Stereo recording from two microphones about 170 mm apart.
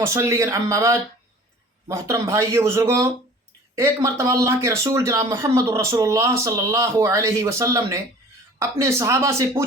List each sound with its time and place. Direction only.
0.1 s speech: 20° right (ahead or behind)